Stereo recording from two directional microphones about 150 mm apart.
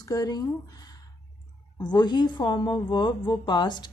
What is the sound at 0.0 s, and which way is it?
A woman's voice, 25° left (ahead or behind).